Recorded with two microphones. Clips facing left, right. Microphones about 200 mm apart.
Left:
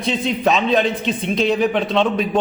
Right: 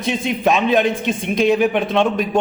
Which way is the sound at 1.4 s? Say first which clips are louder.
Right 3 dB; 10° right (ahead or behind).